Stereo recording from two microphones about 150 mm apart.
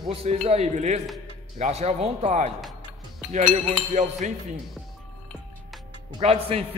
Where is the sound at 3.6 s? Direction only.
50° right (ahead or behind).